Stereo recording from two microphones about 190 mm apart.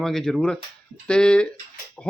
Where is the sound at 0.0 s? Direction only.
Centre (ahead or behind).